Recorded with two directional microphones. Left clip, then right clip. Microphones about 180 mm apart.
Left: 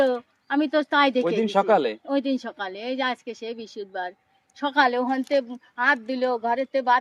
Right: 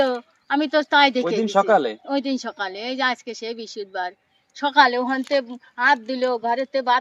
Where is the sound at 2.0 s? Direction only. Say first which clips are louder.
Right 1 dB; centre (ahead or behind).